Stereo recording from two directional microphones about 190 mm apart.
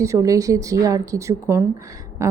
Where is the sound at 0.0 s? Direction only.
15° right (ahead or behind).